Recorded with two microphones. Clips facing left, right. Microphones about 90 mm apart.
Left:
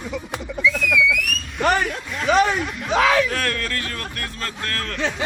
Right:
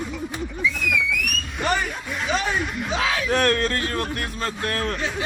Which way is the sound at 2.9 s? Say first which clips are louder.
Left 8 dB; 85° left.